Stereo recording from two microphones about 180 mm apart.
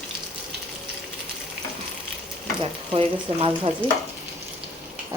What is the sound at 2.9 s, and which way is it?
Speech, 30° right (ahead or behind).